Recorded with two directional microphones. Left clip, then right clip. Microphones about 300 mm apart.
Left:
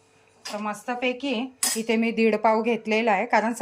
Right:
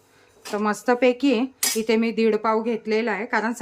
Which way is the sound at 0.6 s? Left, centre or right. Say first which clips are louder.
Right 8 dB; centre.